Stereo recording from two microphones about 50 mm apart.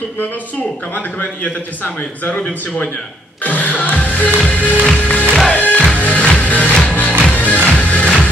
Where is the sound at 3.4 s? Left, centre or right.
Left.